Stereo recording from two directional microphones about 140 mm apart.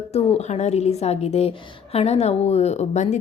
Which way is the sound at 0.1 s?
45° left (ahead or behind).